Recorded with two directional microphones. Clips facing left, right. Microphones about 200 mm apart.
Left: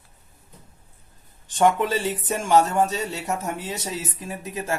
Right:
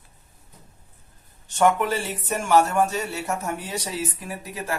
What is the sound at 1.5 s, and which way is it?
Speech, 15° left (ahead or behind).